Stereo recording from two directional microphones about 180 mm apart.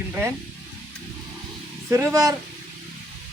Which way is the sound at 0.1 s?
15° right (ahead or behind).